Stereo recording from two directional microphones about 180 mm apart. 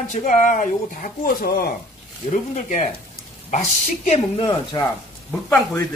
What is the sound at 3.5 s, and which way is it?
Speech, 40° left (ahead or behind).